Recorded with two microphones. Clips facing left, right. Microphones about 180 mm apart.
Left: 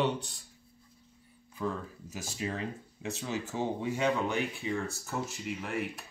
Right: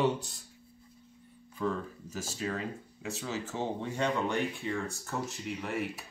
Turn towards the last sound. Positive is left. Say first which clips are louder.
# right 1 dB
turn(degrees=0)  # may be behind; listen again after turning